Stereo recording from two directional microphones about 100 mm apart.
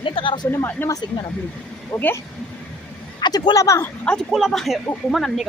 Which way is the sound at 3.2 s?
45° left (ahead or behind).